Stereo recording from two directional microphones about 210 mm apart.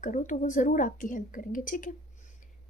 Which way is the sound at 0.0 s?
35° left (ahead or behind).